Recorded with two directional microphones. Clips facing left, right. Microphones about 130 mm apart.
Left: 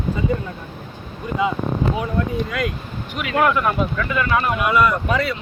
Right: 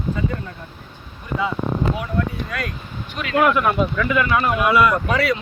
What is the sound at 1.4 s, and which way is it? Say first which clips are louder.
Speech: left 3 dB; 15° left (ahead or behind).